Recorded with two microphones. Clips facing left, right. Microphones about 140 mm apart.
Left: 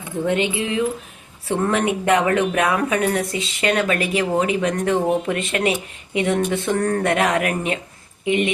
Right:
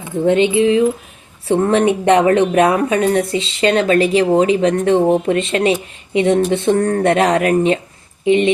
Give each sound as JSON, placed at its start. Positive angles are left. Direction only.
{"t": 0.3, "sound": "speech", "side_deg": -25}